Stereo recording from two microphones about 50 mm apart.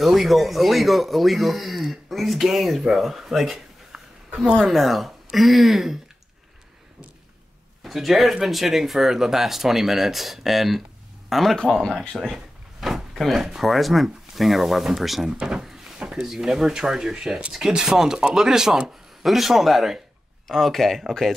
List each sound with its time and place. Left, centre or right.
0.0 s speech: centre
7.8 s speech: centre
15.3 s speech: centre